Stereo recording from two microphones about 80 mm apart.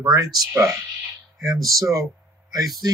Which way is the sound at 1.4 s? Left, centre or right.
Right.